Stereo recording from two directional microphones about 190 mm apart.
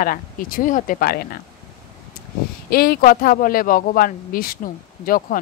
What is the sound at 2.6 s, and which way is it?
Speech, 55° left (ahead or behind).